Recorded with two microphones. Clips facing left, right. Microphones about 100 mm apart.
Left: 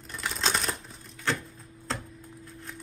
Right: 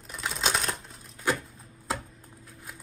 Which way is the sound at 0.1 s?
5° right (ahead or behind).